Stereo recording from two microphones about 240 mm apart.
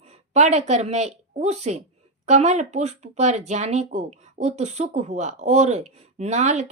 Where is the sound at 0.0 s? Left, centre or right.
Right.